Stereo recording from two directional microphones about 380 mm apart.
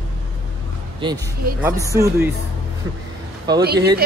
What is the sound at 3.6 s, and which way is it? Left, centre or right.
Speech, right.